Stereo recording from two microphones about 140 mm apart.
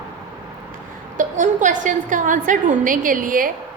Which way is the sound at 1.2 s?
65° right (ahead or behind).